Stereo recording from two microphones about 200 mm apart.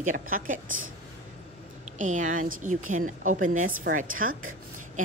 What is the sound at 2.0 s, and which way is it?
A woman's voice, 40° right (ahead or behind).